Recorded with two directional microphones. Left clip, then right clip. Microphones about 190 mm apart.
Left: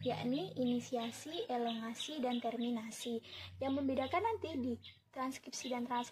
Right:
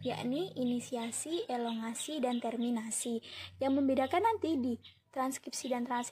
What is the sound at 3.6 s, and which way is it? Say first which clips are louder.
A woman's voice: right 6 dB; 45° right (ahead or behind).